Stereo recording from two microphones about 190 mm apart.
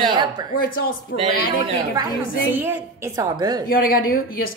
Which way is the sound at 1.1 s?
65° left (ahead or behind).